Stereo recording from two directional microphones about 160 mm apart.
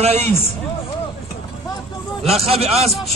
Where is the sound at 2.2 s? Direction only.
40° right (ahead or behind).